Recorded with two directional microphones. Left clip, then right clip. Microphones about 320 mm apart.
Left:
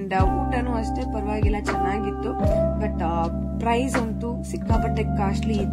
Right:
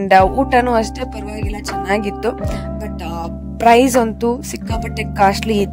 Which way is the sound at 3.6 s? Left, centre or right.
Right.